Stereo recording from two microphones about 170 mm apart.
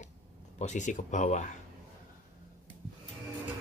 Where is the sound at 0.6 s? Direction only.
45° left (ahead or behind).